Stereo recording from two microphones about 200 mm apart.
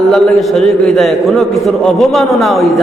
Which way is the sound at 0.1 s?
Centre (ahead or behind).